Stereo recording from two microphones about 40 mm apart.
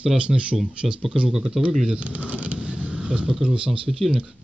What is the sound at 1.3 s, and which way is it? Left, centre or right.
Speech, centre.